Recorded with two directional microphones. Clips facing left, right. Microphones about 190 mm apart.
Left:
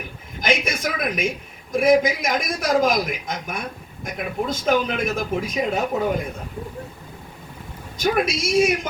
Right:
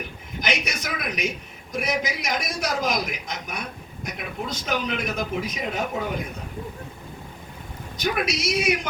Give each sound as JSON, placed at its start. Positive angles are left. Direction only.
{"t": 0.4, "sound": "speech", "side_deg": 50}
{"t": 8.0, "sound": "speech", "side_deg": 50}